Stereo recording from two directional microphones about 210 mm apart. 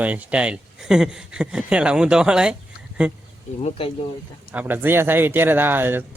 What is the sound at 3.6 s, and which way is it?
Speech, 30° left (ahead or behind).